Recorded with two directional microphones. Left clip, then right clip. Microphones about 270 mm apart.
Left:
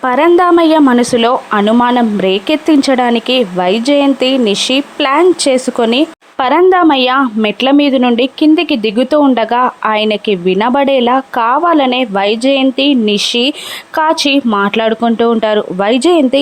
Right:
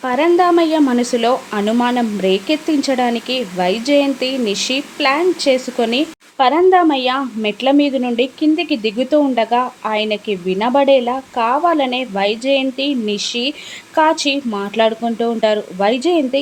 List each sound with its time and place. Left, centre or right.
0.0 s speech: centre